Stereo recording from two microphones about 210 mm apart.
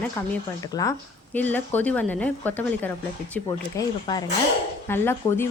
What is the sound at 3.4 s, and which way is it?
Speech, 20° left (ahead or behind).